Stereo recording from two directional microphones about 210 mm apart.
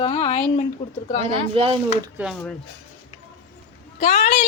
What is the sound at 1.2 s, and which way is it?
Speech, 25° right (ahead or behind).